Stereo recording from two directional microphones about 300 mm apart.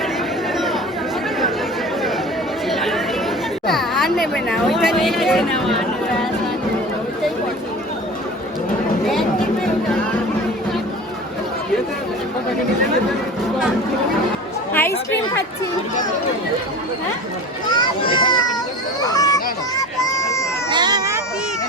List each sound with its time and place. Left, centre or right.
0.5 s chatter: centre
2.6 s chatter: centre
3.7 s speech: centre
14.7 s chatter: centre
17.7 s a child's voice: centre
19.0 s children playing: centre
20.0 s a sound: centre
20.7 s a sound: centre